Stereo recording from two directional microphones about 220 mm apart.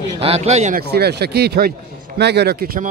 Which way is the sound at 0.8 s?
45° right (ahead or behind).